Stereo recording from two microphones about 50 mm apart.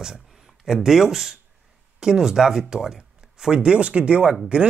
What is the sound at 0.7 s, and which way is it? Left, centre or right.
A man's voice, centre.